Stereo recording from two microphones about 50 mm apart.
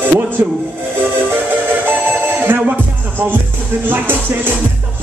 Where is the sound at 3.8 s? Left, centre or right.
Right.